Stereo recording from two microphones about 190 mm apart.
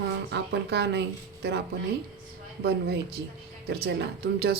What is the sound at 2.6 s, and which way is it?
Speech, 60° right (ahead or behind).